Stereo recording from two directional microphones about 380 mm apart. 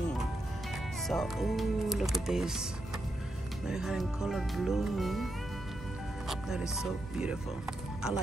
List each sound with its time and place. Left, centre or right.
1.0 s speech: centre
3.6 s speech: centre